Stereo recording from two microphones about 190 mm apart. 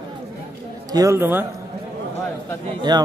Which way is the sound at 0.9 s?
15° right (ahead or behind).